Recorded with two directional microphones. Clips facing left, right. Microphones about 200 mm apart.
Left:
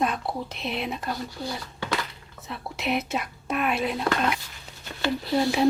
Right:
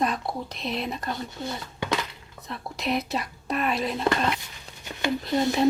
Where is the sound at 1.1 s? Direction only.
20° right (ahead or behind).